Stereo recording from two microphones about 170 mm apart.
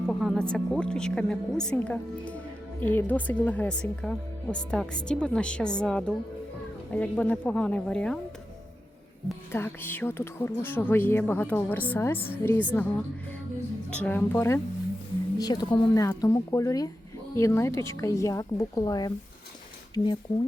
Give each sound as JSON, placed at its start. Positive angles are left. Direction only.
{"t": 0.1, "sound": "speech", "side_deg": 0}
{"t": 9.5, "sound": "speech", "side_deg": 15}